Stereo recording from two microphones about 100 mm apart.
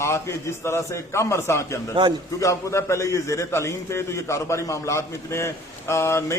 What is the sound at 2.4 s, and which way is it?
A man's voice, 30° left (ahead or behind).